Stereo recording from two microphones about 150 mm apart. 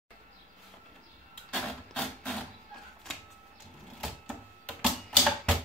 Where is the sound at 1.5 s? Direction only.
5° left (ahead or behind).